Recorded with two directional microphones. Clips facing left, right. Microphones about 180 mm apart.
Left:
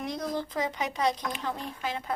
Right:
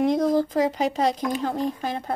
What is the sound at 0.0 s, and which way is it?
Speech, 50° right (ahead or behind).